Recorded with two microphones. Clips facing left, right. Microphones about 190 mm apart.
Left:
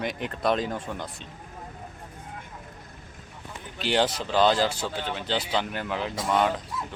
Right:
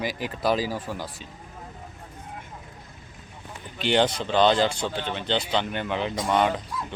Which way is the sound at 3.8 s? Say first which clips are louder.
Right 2 dB; 5° left (ahead or behind).